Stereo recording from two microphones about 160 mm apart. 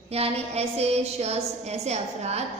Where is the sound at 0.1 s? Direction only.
40° right (ahead or behind).